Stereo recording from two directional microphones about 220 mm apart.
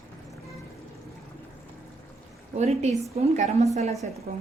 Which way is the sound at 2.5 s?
30° right (ahead or behind).